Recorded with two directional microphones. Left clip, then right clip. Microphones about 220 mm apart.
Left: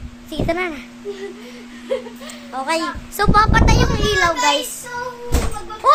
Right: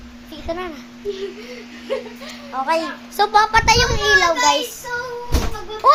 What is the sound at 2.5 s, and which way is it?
Speech, 15° left (ahead or behind).